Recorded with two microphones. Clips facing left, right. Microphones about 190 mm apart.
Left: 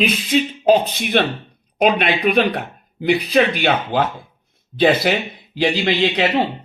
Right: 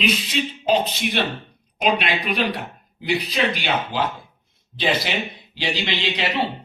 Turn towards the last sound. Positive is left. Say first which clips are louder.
# left 8 dB
turn(degrees=50)  # may be behind; listen again after turning